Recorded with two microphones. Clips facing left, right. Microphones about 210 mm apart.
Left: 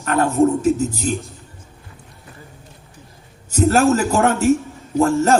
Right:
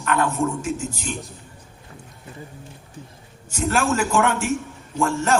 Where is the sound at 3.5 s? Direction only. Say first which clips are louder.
Left 7 dB; 40° left (ahead or behind).